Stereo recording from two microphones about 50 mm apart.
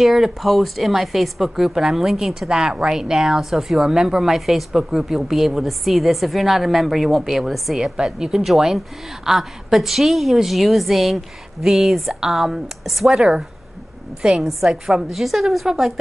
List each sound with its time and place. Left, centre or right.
0.0 s a woman's voice: centre
14.4 s a woman's voice: centre